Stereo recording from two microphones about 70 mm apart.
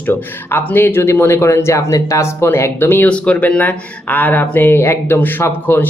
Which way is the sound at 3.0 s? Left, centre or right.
Centre.